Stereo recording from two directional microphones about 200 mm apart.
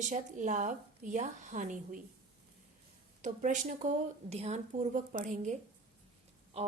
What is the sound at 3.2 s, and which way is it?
A woman's voice, 40° right (ahead or behind).